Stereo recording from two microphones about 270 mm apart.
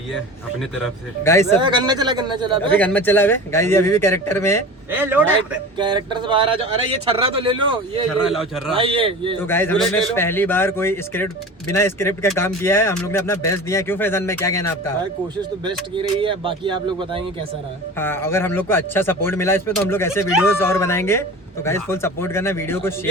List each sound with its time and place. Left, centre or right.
1.2 s speech: centre
1.5 s speech: centre
2.7 s speech: centre
4.9 s speech: centre
5.7 s speech: centre
8.2 s a man's voice: centre
8.7 s speech: centre
9.4 s speech: centre
15.6 s speech: centre
17.9 s speech: centre